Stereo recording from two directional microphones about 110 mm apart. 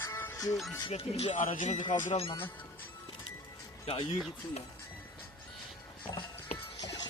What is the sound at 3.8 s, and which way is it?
Speech, 65° left (ahead or behind).